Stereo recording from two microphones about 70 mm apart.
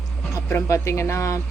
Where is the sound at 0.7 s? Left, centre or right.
Left.